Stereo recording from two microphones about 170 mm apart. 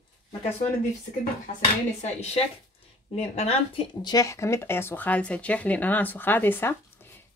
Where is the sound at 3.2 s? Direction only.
40° left (ahead or behind).